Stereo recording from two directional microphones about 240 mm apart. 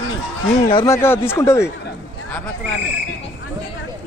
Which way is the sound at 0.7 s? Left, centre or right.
Left.